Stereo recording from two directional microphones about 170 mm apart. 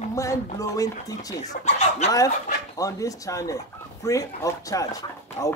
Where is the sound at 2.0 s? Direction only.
40° left (ahead or behind).